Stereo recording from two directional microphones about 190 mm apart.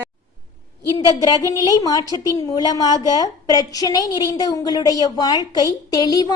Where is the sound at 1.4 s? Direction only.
20° left (ahead or behind).